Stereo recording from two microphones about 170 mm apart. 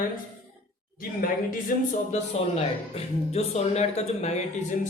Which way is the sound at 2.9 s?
40° left (ahead or behind).